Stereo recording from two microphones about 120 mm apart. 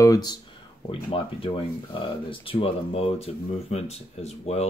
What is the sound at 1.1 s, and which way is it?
Speech, 45° left (ahead or behind).